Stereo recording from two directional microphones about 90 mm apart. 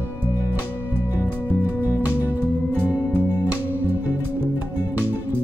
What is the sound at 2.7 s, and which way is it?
Music, 20° right (ahead or behind).